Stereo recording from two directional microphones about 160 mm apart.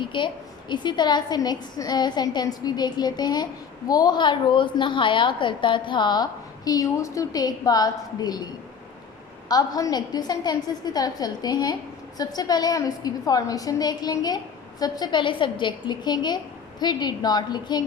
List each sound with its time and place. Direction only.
0.0 s a woman's voice: 30° left (ahead or behind)
9.5 s a woman's voice: 25° left (ahead or behind)